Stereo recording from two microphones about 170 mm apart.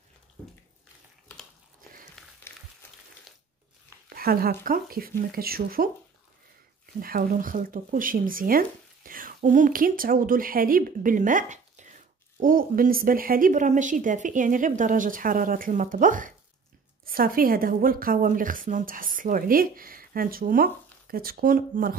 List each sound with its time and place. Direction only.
4.1 s a woman's voice: 60° right (ahead or behind)
7.0 s a woman's voice: 60° right (ahead or behind)